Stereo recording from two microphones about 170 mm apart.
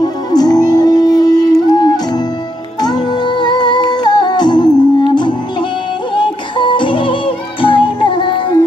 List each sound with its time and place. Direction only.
0.0 s music: 25° left (ahead or behind)